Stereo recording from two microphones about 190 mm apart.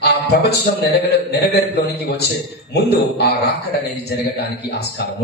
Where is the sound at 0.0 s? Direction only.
60° left (ahead or behind).